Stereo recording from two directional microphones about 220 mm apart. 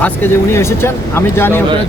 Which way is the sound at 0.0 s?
10° left (ahead or behind).